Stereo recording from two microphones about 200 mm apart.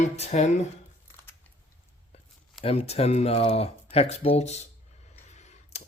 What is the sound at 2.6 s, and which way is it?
Speech, 30° left (ahead or behind).